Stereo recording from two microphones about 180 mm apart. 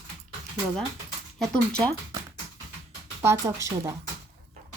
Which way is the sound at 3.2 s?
15° right (ahead or behind).